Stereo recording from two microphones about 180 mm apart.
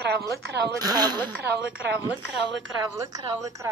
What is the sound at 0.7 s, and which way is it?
Speech, 20° right (ahead or behind).